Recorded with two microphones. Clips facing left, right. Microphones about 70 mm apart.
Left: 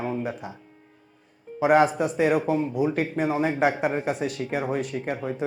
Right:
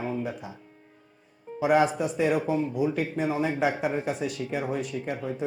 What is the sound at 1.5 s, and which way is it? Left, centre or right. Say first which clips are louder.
Speech: left 3 dB; left.